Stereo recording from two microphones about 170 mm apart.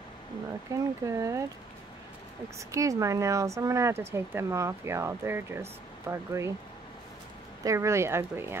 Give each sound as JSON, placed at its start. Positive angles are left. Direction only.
{"t": 0.7, "sound": "speech", "side_deg": -20}
{"t": 2.7, "sound": "speech", "side_deg": -20}
{"t": 7.6, "sound": "speech", "side_deg": -15}